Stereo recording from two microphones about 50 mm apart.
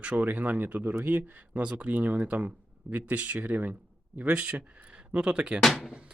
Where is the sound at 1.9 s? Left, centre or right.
Right.